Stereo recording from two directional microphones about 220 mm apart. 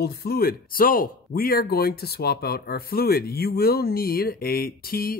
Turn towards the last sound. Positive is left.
turn(degrees=40)  # may be behind; listen again after turning